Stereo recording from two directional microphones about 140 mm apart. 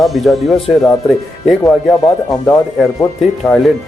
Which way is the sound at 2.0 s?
25° left (ahead or behind).